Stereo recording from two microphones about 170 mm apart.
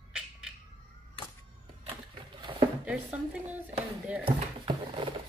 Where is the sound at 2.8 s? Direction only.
10° right (ahead or behind).